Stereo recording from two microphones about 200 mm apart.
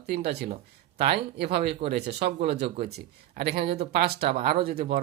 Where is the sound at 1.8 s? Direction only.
25° right (ahead or behind).